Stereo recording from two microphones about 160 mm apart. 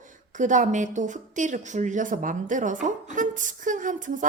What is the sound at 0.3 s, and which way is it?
A woman's voice, 50° right (ahead or behind).